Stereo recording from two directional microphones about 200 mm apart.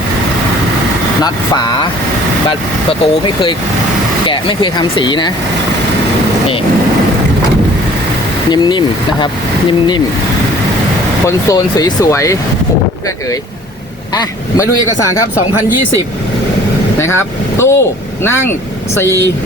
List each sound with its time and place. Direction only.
1.2 s speech: 20° left (ahead or behind)
3.0 s speech: 25° left (ahead or behind)
8.4 s speech: 20° left (ahead or behind)
11.3 s speech: 15° left (ahead or behind)
14.2 s speech: 15° left (ahead or behind)
17.0 s speech: 10° left (ahead or behind)